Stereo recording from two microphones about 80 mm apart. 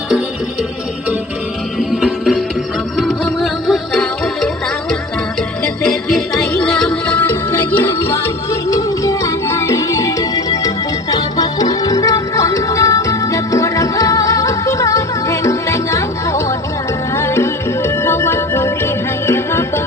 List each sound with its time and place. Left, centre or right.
1.8 s music: centre
5.6 s music: centre; by 19.8 s left